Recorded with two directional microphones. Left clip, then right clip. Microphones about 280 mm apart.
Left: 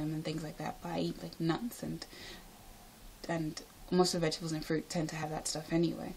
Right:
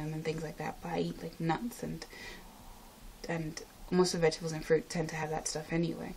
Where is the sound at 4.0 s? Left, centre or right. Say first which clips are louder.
Right 3 dB; centre.